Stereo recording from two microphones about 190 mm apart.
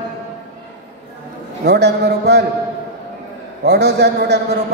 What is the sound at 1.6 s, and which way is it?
Speech, 60° right (ahead or behind).